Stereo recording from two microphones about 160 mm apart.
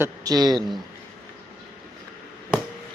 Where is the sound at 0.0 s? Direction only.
25° right (ahead or behind).